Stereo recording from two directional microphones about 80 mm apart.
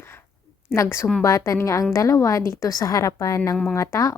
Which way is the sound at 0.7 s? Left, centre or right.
Left.